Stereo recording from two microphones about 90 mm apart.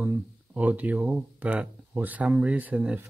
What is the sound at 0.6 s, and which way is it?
Speech, 15° right (ahead or behind).